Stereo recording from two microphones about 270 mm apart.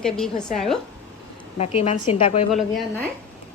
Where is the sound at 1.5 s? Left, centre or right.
Left.